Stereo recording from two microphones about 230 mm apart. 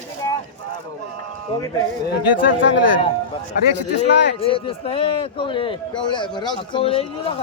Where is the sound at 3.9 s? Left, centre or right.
Left.